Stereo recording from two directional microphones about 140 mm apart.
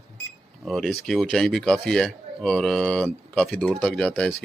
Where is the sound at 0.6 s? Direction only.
Centre (ahead or behind).